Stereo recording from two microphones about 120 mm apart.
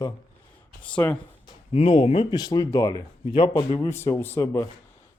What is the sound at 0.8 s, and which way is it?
Speech, 10° left (ahead or behind).